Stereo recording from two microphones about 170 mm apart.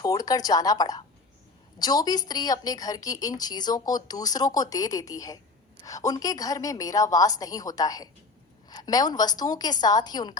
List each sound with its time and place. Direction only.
0.0 s a woman's voice: 20° left (ahead or behind)